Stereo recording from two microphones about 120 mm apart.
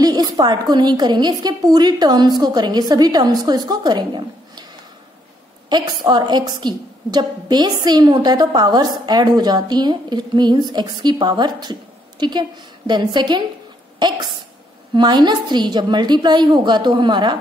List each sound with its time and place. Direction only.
0.0 s a woman's voice: 35° right (ahead or behind)
5.7 s a woman's voice: 35° right (ahead or behind)